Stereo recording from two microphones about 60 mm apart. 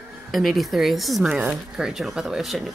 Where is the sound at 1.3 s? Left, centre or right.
Right.